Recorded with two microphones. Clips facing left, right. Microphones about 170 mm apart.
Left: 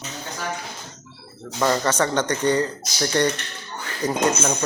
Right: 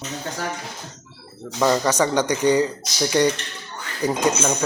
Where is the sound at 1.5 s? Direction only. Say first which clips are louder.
Right 2 dB; 5° right (ahead or behind).